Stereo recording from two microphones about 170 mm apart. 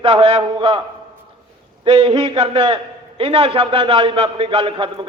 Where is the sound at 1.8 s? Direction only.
30° right (ahead or behind).